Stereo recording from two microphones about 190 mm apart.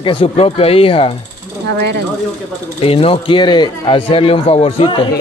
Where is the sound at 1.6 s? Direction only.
65° right (ahead or behind).